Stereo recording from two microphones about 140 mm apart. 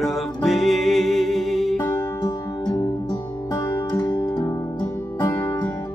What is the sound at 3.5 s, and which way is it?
Music, 25° left (ahead or behind).